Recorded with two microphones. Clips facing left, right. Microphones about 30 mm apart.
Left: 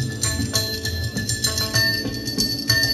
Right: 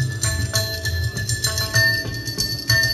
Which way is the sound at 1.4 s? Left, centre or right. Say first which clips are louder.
Right 3 dB; left.